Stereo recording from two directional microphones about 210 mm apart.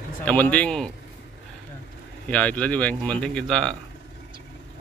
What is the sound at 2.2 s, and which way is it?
Speech, 5° left (ahead or behind).